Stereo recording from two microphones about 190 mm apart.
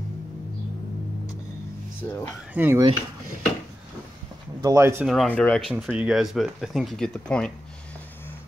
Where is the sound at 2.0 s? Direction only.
10° left (ahead or behind).